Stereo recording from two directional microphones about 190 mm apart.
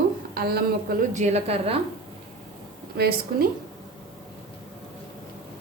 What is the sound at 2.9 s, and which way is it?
Speech, 55° right (ahead or behind).